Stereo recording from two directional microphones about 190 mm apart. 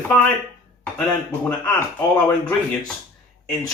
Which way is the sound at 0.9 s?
10° left (ahead or behind).